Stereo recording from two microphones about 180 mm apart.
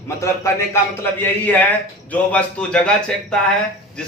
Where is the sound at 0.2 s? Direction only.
15° left (ahead or behind).